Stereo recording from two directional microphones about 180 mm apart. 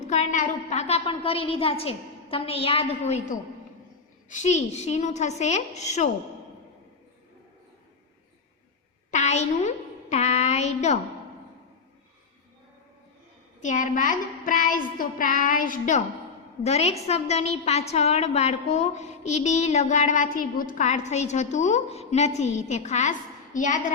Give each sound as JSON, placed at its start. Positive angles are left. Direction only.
{"t": 0.1, "sound": "a woman's voice", "side_deg": 40}
{"t": 9.0, "sound": "a sound", "side_deg": 40}
{"t": 13.6, "sound": "child singing", "side_deg": 45}
{"t": 16.6, "sound": "a woman's voice", "side_deg": 35}
{"t": 23.6, "sound": "child singing", "side_deg": 45}